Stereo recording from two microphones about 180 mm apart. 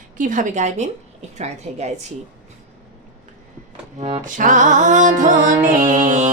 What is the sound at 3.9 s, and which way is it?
A woman's voice, 40° right (ahead or behind).